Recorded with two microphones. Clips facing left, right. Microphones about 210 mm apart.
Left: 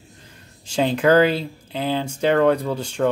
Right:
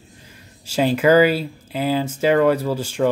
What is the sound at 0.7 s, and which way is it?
Speech, 5° right (ahead or behind).